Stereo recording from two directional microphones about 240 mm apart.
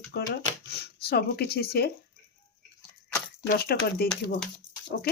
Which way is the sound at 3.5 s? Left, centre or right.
Left.